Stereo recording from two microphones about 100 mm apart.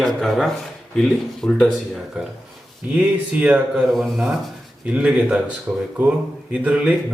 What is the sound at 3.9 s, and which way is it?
Speech, centre (ahead or behind).